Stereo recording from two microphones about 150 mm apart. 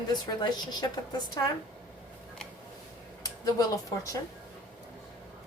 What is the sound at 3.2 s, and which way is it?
Speech, 25° left (ahead or behind).